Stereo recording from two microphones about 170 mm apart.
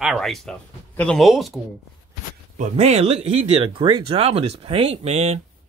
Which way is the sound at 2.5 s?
40° right (ahead or behind).